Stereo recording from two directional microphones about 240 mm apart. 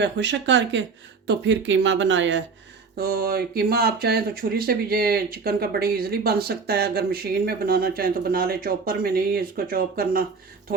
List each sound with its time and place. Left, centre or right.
0.0 s speech: right
3.0 s speech: right